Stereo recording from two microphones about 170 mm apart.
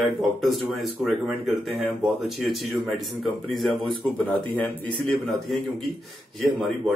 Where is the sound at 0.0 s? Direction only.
Centre (ahead or behind).